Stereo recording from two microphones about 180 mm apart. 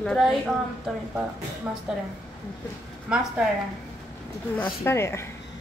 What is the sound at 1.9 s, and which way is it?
Speech, 5° right (ahead or behind).